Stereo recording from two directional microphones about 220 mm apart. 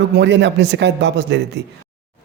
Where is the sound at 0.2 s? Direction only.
55° right (ahead or behind).